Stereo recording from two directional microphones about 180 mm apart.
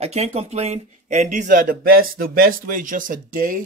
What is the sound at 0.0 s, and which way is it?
Speech, 35° right (ahead or behind).